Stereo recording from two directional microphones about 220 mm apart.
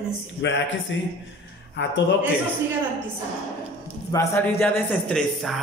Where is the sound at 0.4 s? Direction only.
55° left (ahead or behind).